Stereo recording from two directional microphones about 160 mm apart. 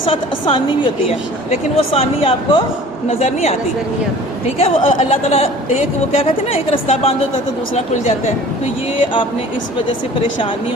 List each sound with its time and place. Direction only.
0.0 s a woman's voice: 35° left (ahead or behind)